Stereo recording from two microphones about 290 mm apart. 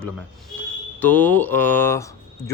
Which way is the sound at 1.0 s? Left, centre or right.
Centre.